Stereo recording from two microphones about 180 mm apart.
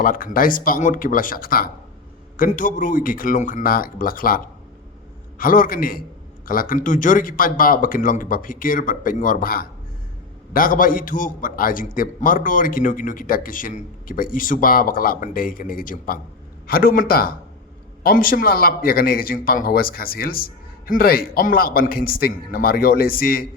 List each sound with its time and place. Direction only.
0.0 s a man's voice: 50° left (ahead or behind)
5.4 s a man's voice: 50° left (ahead or behind)